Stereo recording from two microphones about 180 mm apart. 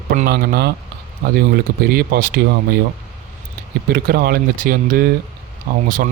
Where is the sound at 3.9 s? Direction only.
55° right (ahead or behind).